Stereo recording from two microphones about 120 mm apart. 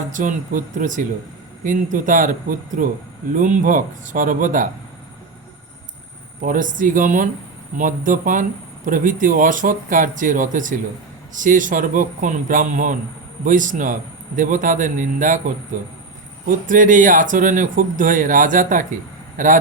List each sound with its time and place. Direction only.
0.1 s speech: 90° right
3.3 s speech: 90° right
6.6 s speech: 90° right